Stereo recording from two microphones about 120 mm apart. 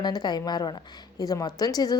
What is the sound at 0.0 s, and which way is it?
A woman's voice, 35° left (ahead or behind).